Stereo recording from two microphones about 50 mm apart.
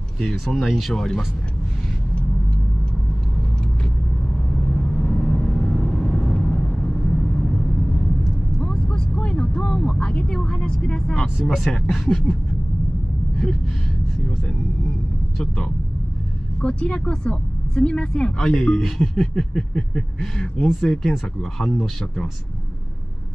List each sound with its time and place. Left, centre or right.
0.2 s speech: centre
0.6 s a sound: centre
0.9 s speech: centre
4.7 s vehicle: left
11.4 s speech: centre
11.9 s a sound: centre
16.6 s speech: left
18.8 s a sound: centre
20.8 s speech: centre